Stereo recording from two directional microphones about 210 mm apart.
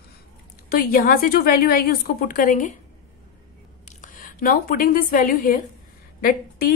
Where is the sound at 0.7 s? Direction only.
45° left (ahead or behind).